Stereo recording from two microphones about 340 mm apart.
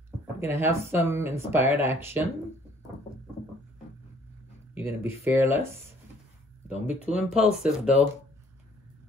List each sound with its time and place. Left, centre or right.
0.4 s speech: centre
5.0 s speech: centre
6.9 s speech: centre